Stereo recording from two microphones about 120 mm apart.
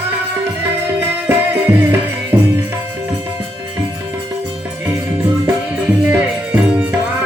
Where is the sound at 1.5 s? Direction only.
15° right (ahead or behind).